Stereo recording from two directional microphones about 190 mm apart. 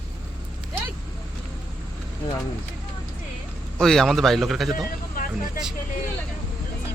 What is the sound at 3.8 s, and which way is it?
Speech, centre (ahead or behind).